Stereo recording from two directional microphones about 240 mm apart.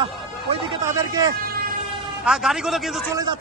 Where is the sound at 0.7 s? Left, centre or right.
Centre.